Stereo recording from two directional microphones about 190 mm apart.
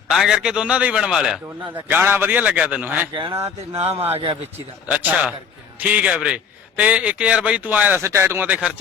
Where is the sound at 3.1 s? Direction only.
25° right (ahead or behind).